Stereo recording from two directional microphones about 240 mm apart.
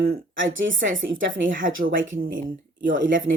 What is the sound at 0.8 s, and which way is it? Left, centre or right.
Speech, right.